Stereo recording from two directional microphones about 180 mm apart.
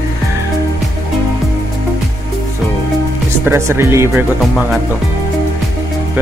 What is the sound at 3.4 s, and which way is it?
Speech, 15° right (ahead or behind).